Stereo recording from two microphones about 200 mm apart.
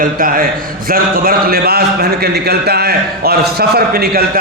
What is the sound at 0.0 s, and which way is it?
A man's voice, 45° right (ahead or behind).